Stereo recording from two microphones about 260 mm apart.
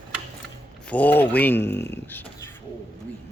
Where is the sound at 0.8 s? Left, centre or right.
Centre.